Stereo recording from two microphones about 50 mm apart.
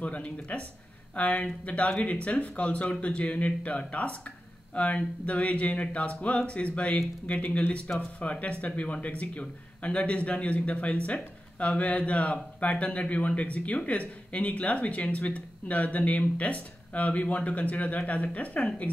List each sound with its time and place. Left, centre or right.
0.0 s speech: left